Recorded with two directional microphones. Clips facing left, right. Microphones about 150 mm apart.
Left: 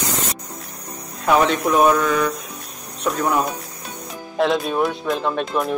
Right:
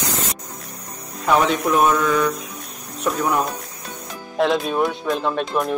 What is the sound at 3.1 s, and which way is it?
Speech, 5° right (ahead or behind).